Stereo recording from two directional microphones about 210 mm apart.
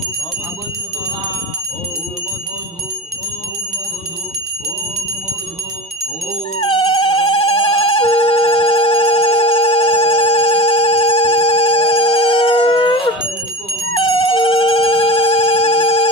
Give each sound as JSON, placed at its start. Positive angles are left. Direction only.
{"t": 6.6, "sound": "ringtone", "side_deg": 25}
{"t": 14.0, "sound": "telephone bell ringing", "side_deg": 25}